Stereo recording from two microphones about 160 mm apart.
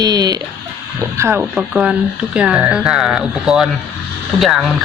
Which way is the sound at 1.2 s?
10° right (ahead or behind).